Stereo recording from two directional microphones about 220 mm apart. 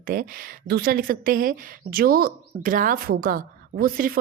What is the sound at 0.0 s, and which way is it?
Speech, 40° right (ahead or behind).